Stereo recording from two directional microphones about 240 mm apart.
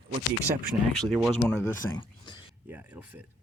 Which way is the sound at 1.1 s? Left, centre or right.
Centre.